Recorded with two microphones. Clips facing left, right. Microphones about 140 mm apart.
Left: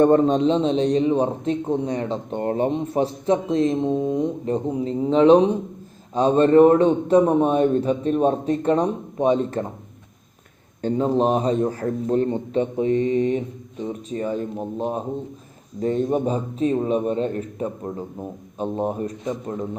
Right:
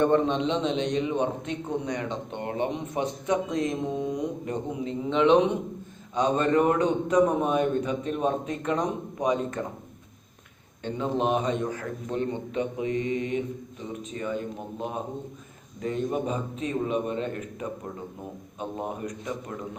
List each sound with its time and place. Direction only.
0.0 s a man's voice: 40° left (ahead or behind)
10.8 s a man's voice: 35° left (ahead or behind)